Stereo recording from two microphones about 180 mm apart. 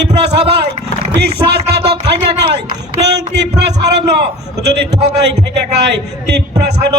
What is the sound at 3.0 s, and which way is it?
A man's voice, 70° right (ahead or behind).